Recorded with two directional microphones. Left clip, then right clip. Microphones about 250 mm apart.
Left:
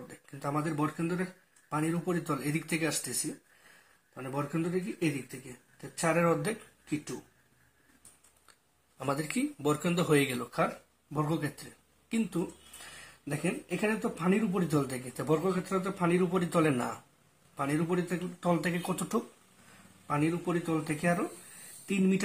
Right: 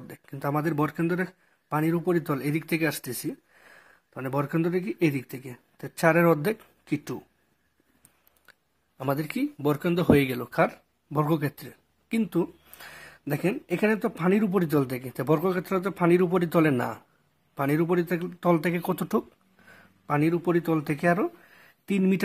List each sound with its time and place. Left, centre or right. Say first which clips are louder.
0.1 s speech: right 6 dB; right
8.9 s speech: right 4 dB; right